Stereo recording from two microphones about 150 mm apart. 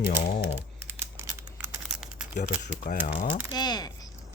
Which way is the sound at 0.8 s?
15° right (ahead or behind).